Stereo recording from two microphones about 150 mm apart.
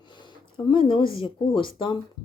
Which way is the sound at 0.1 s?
30° left (ahead or behind).